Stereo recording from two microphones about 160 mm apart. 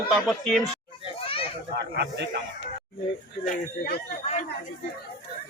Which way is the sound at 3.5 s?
70° left (ahead or behind).